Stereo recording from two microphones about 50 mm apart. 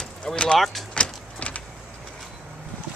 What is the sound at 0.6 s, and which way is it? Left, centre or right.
Speech, centre.